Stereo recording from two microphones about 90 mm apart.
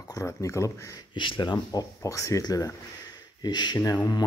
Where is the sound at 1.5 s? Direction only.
45° left (ahead or behind).